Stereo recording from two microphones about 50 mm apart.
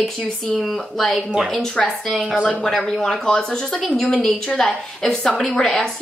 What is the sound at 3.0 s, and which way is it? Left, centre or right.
A woman's voice, centre.